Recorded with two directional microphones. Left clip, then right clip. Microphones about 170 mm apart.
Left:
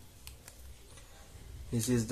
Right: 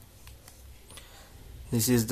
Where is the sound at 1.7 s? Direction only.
25° right (ahead or behind).